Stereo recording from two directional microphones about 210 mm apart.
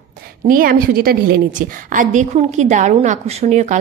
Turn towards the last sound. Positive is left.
turn(degrees=-35)  # may be behind; listen again after turning